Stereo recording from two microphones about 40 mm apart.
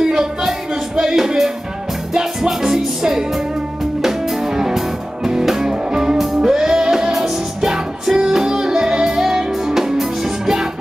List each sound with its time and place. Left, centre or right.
0.0 s music: centre